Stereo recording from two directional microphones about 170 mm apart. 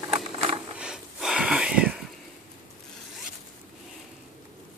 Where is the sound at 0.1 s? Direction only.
35° right (ahead or behind).